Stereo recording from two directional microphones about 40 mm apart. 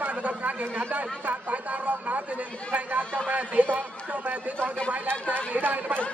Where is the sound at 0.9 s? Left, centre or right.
Right.